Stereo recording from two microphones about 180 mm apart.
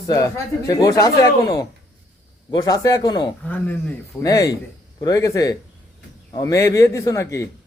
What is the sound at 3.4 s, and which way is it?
A man's voice, 10° left (ahead or behind).